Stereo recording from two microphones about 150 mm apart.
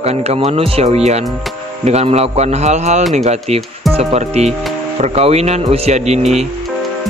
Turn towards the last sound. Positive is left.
turn(degrees=-45)  # may be behind; listen again after turning